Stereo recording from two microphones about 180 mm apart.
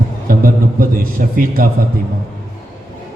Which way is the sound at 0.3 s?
50° right (ahead or behind).